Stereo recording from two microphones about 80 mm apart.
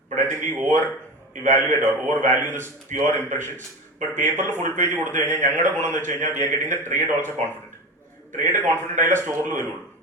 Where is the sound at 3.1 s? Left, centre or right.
Left.